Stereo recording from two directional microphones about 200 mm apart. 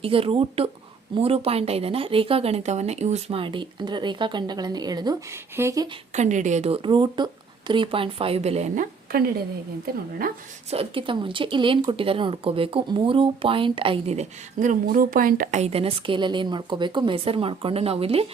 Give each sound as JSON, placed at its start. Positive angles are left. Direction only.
{"t": 0.0, "sound": "speech", "side_deg": -25}
{"t": 6.1, "sound": "a woman's voice", "side_deg": -35}
{"t": 10.7, "sound": "speech", "side_deg": -30}